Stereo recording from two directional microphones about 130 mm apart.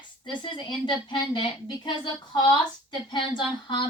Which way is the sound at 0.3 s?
40° left (ahead or behind).